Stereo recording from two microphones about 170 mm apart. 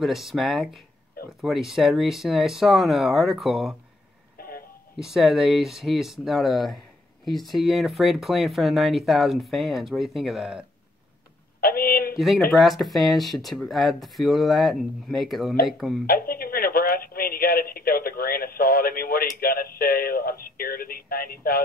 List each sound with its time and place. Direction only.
0.0 s speech: centre (ahead or behind)
4.4 s a sound: 60° left (ahead or behind)
4.9 s speech: 5° right (ahead or behind)
11.6 s a sound: 60° left (ahead or behind)
12.5 s speech: centre (ahead or behind)
16.1 s speech: 60° left (ahead or behind)